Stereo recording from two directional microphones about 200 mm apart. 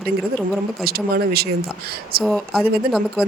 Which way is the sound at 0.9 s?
50° right (ahead or behind).